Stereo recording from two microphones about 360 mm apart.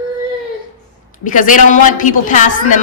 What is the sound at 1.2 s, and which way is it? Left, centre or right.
A woman's voice, left.